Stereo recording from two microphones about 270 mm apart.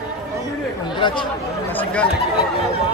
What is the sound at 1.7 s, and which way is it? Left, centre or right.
Speech, centre.